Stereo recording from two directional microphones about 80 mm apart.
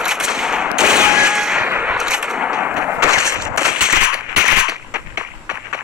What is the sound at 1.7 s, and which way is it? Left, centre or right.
Artillery fire, centre.